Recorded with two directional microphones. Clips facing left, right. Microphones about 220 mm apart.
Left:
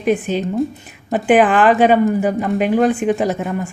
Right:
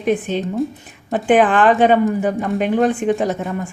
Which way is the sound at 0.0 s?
5° left (ahead or behind).